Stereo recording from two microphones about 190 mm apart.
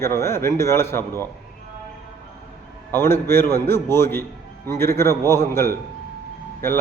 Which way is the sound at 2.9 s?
10° left (ahead or behind).